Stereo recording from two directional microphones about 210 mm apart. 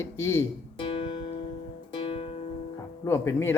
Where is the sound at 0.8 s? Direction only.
25° left (ahead or behind).